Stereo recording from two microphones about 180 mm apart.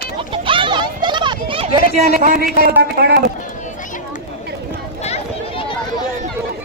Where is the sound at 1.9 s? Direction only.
45° right (ahead or behind).